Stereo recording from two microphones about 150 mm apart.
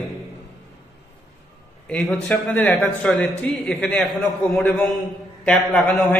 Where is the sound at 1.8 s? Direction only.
5° left (ahead or behind).